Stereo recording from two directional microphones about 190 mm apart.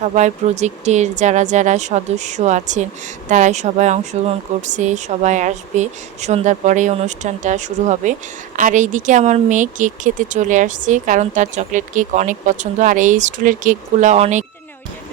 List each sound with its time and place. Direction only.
0.0 s speech: 40° right (ahead or behind)